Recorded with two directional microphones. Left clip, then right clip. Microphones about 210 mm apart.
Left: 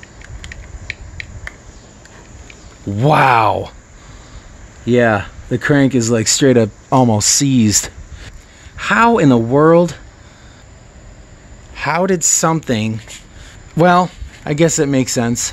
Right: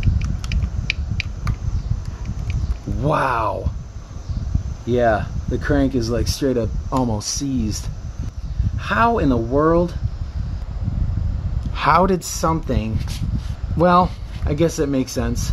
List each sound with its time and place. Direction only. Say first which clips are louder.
0.0 s rodents: right 4 dB; 45° right (ahead or behind)
3.0 s speech: left 8 dB; 55° left (ahead or behind)
4.8 s speech: left 4 dB; 55° left (ahead or behind)
11.7 s a sound: right 1 dB; 5° left (ahead or behind)
12.1 s speech: left 6 dB; 30° left (ahead or behind); by 12.9 s 45° left (ahead or behind)
13.7 s speech: left 4 dB; 35° left (ahead or behind)
14.4 s speech: left 6 dB; 45° left (ahead or behind)